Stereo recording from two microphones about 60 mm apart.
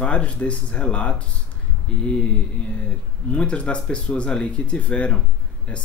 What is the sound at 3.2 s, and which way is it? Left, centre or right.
Speech, centre.